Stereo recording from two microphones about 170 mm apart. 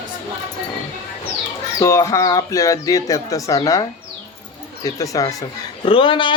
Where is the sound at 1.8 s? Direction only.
20° left (ahead or behind).